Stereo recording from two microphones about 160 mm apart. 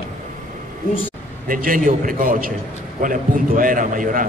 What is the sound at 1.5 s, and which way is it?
A man's voice, 60° right (ahead or behind).